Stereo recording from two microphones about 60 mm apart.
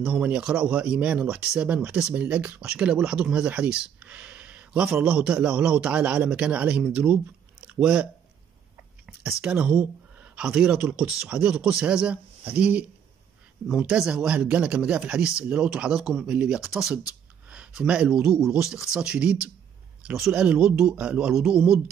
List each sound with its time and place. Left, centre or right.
0.0 s a man's voice: centre
2.6 s a man's voice: centre
10.8 s a man's voice: right
13.9 s speech: centre
16.6 s speech: centre
17.8 s speech: centre